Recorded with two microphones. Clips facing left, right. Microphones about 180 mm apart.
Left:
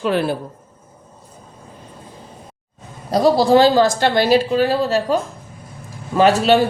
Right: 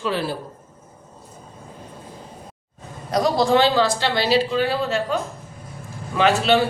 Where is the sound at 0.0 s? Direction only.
55° left (ahead or behind).